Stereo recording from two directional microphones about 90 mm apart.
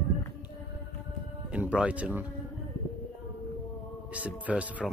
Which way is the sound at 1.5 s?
15° right (ahead or behind).